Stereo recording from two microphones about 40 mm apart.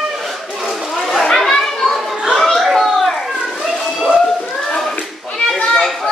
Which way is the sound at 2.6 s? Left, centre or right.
Centre.